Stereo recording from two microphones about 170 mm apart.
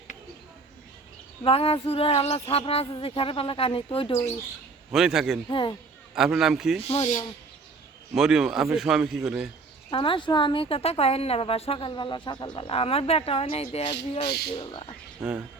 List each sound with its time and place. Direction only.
1.5 s a woman's voice: 35° left (ahead or behind)
4.9 s a man's voice: 5° right (ahead or behind)
5.5 s speech: 30° left (ahead or behind)
6.1 s a man's voice: 5° right (ahead or behind)
6.8 s a woman's voice: 35° left (ahead or behind)
8.1 s a man's voice: 5° right (ahead or behind)
9.9 s a woman's voice: 30° left (ahead or behind)
15.2 s speech: 5° right (ahead or behind)